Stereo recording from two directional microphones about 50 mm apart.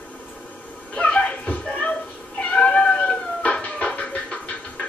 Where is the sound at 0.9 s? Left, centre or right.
Left.